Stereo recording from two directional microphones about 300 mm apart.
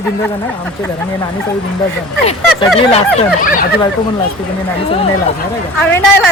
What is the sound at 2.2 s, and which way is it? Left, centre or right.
Speech, centre.